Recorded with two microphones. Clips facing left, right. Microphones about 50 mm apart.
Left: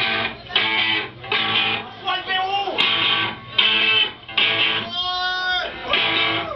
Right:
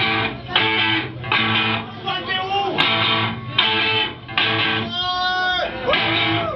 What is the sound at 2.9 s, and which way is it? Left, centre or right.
Music, left.